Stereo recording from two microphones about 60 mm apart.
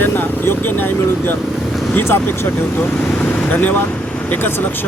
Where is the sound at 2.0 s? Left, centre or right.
Left.